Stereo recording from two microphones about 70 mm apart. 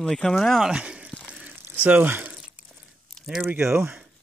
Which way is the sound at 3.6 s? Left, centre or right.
Right.